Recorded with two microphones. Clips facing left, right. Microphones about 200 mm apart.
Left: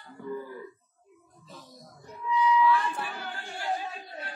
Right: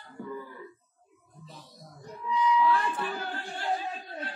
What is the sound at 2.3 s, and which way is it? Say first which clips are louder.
Music: left 1 dB; 35° right (ahead or behind).